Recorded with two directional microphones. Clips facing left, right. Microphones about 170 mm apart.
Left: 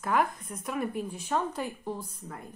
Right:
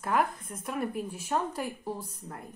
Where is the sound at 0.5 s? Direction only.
5° right (ahead or behind).